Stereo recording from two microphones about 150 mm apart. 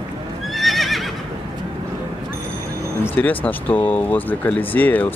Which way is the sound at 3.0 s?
10° left (ahead or behind).